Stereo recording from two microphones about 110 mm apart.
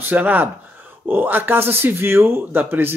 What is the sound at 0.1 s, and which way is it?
Speech, 15° right (ahead or behind).